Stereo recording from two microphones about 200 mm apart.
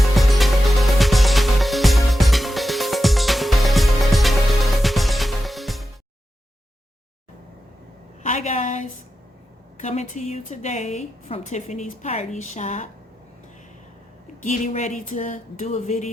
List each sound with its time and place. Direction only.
0.2 s music: centre (ahead or behind)
8.2 s a sound: 35° left (ahead or behind)
9.7 s a woman's voice: 35° left (ahead or behind)
14.4 s a woman's voice: 35° left (ahead or behind)